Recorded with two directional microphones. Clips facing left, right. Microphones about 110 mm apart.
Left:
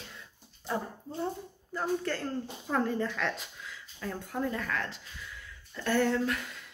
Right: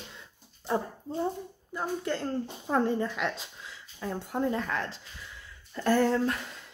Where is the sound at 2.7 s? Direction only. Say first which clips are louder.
Right 3 dB; 30° right (ahead or behind).